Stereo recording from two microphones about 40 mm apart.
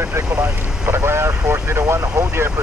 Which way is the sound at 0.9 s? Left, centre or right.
Right.